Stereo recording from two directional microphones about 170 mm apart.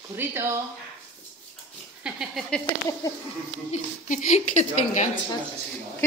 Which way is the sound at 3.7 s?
45° left (ahead or behind).